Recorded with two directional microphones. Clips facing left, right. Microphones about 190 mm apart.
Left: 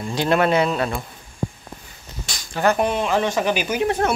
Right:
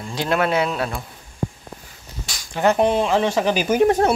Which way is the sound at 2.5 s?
25° right (ahead or behind).